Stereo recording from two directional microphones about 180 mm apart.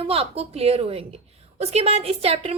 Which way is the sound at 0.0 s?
30° right (ahead or behind).